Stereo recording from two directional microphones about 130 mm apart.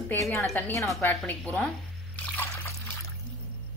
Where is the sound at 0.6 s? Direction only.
20° left (ahead or behind).